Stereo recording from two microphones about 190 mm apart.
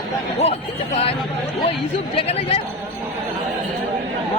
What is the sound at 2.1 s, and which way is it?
Speech, 30° left (ahead or behind).